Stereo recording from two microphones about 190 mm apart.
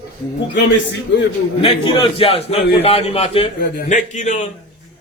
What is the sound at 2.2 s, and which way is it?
A man's voice, 30° left (ahead or behind).